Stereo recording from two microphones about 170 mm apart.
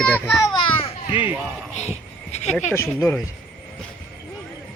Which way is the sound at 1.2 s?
10° right (ahead or behind).